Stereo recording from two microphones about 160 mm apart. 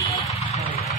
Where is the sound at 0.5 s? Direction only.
40° left (ahead or behind).